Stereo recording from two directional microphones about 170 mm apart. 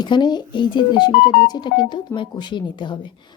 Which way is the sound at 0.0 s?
25° left (ahead or behind).